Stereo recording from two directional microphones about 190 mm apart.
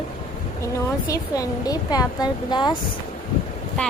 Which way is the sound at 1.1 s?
20° left (ahead or behind).